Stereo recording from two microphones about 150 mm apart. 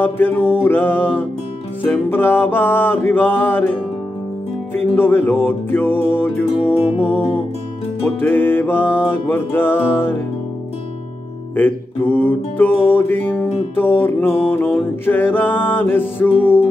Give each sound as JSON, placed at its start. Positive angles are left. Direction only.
{"t": 0.0, "sound": "music", "side_deg": 15}
{"t": 4.7, "sound": "music", "side_deg": 15}
{"t": 6.7, "sound": "music", "side_deg": 40}
{"t": 8.2, "sound": "music", "side_deg": 10}
{"t": 11.5, "sound": "music", "side_deg": 10}